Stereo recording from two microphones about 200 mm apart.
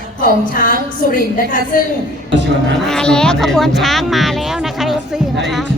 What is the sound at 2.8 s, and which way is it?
Speech, 5° left (ahead or behind).